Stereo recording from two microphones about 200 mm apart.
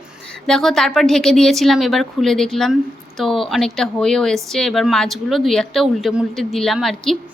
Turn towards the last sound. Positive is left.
turn(degrees=0)  # may be behind; listen again after turning